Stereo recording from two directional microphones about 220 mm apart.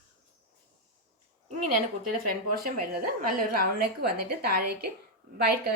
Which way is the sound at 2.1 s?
40° right (ahead or behind).